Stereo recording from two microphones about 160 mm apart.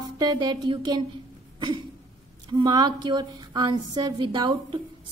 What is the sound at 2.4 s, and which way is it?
A woman's voice, 25° right (ahead or behind).